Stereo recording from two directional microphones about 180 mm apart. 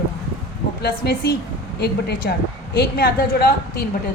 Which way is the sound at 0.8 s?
65° left (ahead or behind).